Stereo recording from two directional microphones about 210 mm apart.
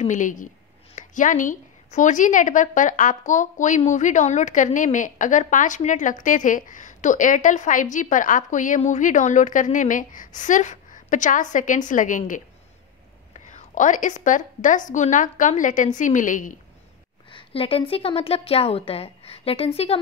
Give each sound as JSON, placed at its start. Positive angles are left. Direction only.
{"t": 0.0, "sound": "a woman's voice", "side_deg": 35}
{"t": 17.3, "sound": "a woman's voice", "side_deg": 25}